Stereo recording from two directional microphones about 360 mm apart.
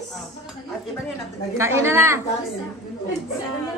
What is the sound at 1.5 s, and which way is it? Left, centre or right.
Speech, centre.